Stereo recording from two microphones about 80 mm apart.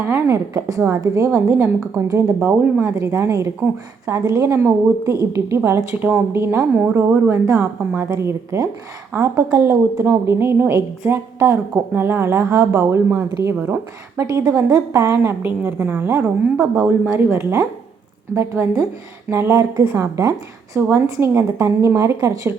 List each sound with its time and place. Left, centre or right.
0.0 s a woman's voice: right
2.5 s a woman's voice: right
2.9 s speech: right
6.0 s a woman's voice: right
6.3 s a woman's voice: right